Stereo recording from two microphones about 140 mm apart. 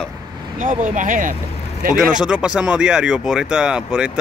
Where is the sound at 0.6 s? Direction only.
65° right (ahead or behind).